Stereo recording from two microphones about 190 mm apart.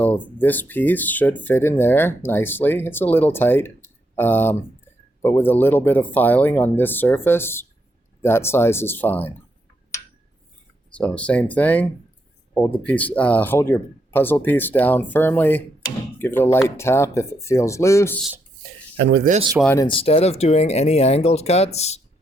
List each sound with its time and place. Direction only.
0.0 s speech: 10° left (ahead or behind)
10.9 s speech: 5° left (ahead or behind)
18.9 s speech: 60° right (ahead or behind)
19.7 s speech: 25° left (ahead or behind)